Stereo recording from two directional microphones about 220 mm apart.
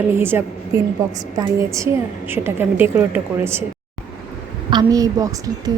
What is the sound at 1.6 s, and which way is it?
A woman's voice, 15° right (ahead or behind).